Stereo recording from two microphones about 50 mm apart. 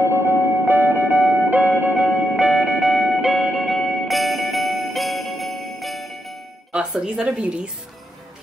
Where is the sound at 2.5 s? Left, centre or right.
Centre.